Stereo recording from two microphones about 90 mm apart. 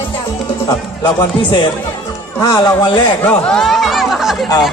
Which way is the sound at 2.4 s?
45° left (ahead or behind).